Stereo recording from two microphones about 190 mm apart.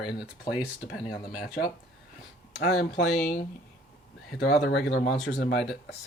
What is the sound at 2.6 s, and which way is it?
Speech, 60° left (ahead or behind).